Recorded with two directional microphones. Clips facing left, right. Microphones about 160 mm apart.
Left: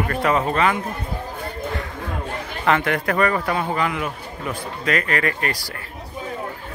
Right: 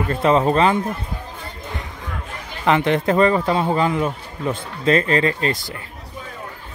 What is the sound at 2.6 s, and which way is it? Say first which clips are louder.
A man's voice: right 3 dB; 20° right (ahead or behind).